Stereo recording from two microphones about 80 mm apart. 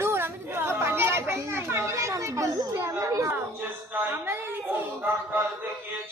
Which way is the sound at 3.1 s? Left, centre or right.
Right.